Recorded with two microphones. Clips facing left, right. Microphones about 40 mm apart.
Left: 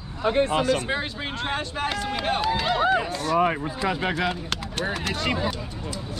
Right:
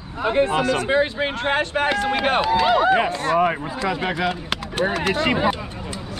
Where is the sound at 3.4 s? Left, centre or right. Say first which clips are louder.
Even; right.